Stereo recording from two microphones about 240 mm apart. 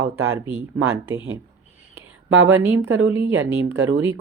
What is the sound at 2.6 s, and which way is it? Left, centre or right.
Speech, centre.